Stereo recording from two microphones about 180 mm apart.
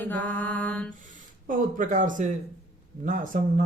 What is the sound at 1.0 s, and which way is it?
Speech, 45° right (ahead or behind).